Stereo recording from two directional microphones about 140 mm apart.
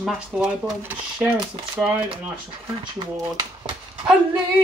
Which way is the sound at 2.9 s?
30° right (ahead or behind).